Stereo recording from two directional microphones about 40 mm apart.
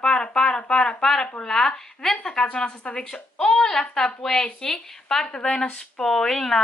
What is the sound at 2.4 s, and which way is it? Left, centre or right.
Speech, left.